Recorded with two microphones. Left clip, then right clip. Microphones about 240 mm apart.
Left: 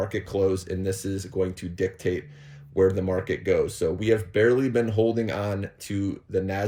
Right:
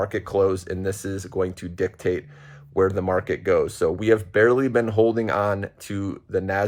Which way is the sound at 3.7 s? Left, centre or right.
Right.